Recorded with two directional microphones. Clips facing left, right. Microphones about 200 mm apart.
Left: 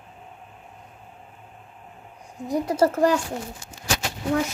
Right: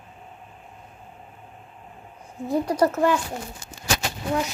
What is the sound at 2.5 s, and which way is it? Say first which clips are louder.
Speech: even; 25° left (ahead or behind).